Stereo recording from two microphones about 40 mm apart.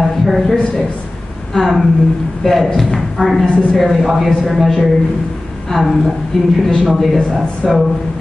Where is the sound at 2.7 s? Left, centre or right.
Centre.